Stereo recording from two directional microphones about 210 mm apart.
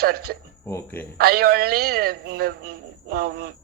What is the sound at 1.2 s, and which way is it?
A man's voice, 45° right (ahead or behind).